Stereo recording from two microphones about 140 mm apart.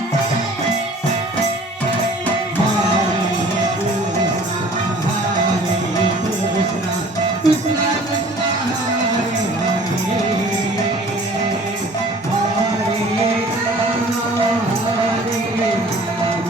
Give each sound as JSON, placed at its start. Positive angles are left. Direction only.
{"t": 7.4, "sound": "music", "side_deg": 25}